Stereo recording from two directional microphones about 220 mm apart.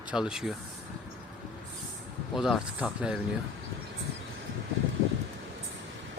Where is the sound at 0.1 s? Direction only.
5° right (ahead or behind).